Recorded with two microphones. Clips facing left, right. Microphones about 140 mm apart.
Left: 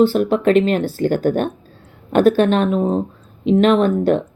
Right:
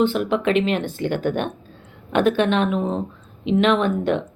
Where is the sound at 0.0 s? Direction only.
40° left (ahead or behind).